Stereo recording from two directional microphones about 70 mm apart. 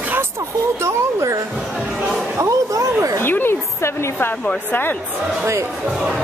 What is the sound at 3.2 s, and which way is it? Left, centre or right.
Speech, left.